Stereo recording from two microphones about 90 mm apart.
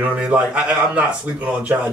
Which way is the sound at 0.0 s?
15° right (ahead or behind).